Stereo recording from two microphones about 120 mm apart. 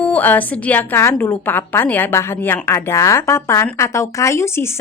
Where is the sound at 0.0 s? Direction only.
15° left (ahead or behind).